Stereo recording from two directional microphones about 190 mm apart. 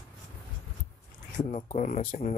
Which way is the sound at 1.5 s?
40° left (ahead or behind).